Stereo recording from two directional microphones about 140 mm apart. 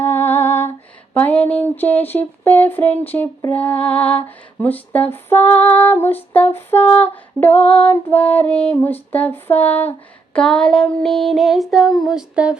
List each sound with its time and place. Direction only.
0.0 s lullaby: 15° left (ahead or behind)
1.1 s female singing: 10° left (ahead or behind)
10.3 s child singing: 5° left (ahead or behind)